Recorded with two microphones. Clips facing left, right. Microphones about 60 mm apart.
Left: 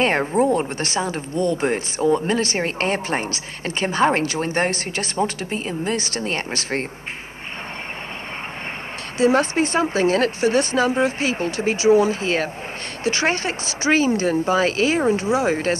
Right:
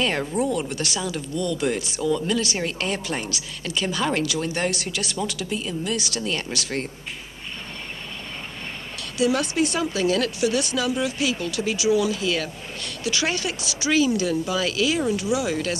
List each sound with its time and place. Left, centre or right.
0.0 s speech: left
9.2 s speech: left